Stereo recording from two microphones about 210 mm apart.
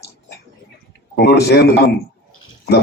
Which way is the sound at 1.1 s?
50° left (ahead or behind).